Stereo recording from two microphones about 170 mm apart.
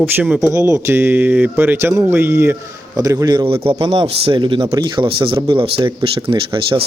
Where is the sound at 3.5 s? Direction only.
35° right (ahead or behind).